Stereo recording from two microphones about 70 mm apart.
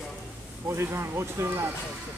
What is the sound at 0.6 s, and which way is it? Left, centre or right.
Speech, right.